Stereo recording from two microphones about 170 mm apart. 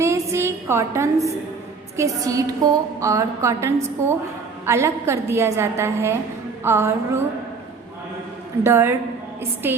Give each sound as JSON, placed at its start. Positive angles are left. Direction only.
{"t": 0.0, "sound": "a sound", "side_deg": -15}
{"t": 2.0, "sound": "a woman's voice", "side_deg": -20}
{"t": 8.6, "sound": "a woman's voice", "side_deg": -15}